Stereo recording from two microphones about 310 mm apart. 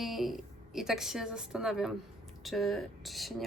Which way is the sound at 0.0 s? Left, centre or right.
Centre.